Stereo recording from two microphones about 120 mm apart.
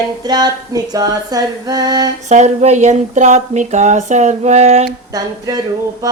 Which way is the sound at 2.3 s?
70° right (ahead or behind).